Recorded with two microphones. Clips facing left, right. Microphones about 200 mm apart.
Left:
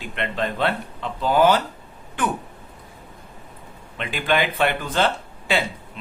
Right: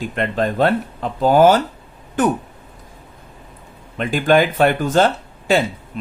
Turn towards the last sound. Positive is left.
turn(degrees=-45)  # may be behind; listen again after turning